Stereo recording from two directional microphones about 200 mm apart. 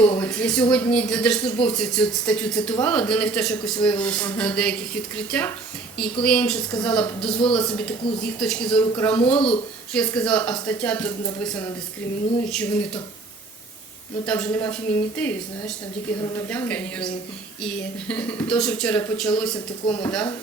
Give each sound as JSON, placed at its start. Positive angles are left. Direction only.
{"t": 0.0, "sound": "speech", "side_deg": 5}
{"t": 14.3, "sound": "speech", "side_deg": 5}